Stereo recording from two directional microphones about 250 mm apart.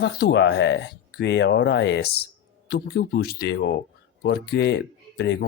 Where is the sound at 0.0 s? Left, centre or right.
Left.